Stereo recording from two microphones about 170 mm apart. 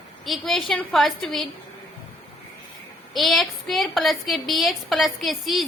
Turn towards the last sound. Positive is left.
turn(degrees=0)  # may be behind; listen again after turning